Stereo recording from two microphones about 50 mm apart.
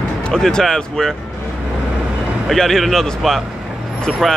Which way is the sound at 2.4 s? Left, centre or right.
Centre.